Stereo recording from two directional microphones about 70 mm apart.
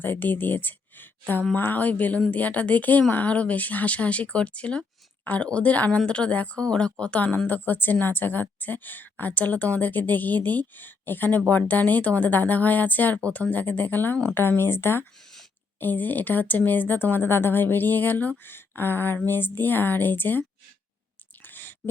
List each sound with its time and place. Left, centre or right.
0.0 s a woman's voice: left
7.4 s a woman's voice: left
21.4 s a sound: left